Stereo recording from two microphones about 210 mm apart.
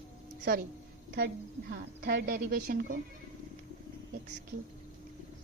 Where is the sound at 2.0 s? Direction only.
45° right (ahead or behind).